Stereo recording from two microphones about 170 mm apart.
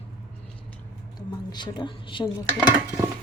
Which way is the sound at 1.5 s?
25° left (ahead or behind).